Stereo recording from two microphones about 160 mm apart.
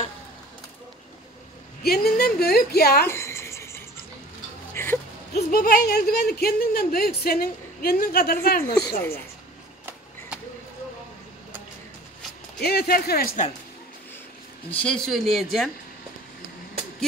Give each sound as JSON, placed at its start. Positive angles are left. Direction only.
{"t": 1.8, "sound": "a woman's voice", "side_deg": 75}
{"t": 3.1, "sound": "cricket", "side_deg": 15}
{"t": 4.8, "sound": "whimper", "side_deg": 15}
{"t": 5.3, "sound": "a woman's voice", "side_deg": 70}
{"t": 12.5, "sound": "a woman's voice", "side_deg": 80}
{"t": 14.7, "sound": "speech", "side_deg": 5}